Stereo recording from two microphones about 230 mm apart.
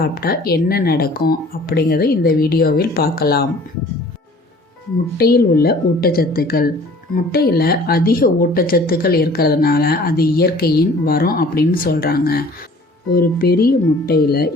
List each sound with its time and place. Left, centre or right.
0.0 s speech: left
5.1 s speech: left